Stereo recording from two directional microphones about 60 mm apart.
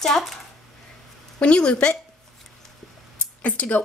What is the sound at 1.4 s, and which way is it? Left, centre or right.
Speech, centre.